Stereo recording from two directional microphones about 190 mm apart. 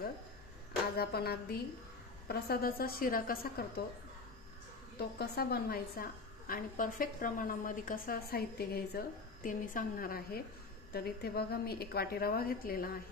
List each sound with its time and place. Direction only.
0.9 s a woman's voice: 55° left (ahead or behind)
4.9 s a woman's voice: 55° left (ahead or behind)